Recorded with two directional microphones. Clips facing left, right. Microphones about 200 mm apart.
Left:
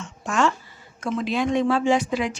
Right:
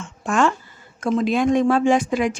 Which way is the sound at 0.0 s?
55° right (ahead or behind).